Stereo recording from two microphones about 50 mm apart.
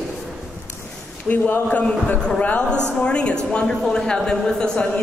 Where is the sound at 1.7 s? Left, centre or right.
Left.